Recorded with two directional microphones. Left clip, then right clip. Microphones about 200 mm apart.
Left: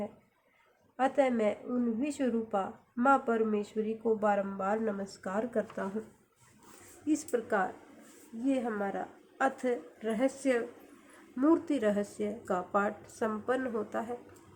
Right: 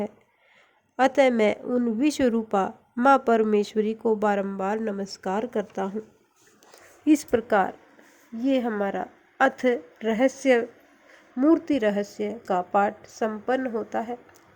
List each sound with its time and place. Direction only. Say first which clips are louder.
0.9 s a woman's voice: right 9 dB; 45° right (ahead or behind)
7.1 s a woman's voice: right 10 dB; 40° right (ahead or behind); by 14.2 s 20° right (ahead or behind)